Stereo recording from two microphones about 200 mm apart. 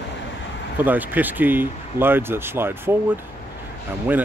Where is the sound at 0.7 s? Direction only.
10° right (ahead or behind).